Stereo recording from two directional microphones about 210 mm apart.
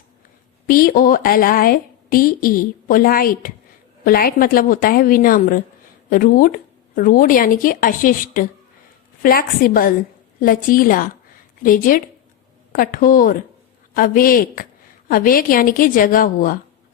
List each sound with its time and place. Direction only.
0.7 s a woman's voice: 45° left (ahead or behind)